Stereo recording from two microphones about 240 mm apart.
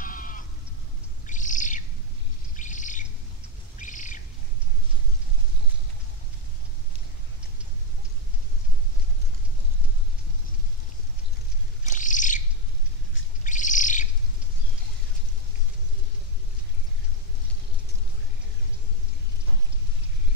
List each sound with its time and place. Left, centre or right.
0.0 s sheep: left
1.2 s bird: left
3.7 s squawk: left
11.9 s bird: left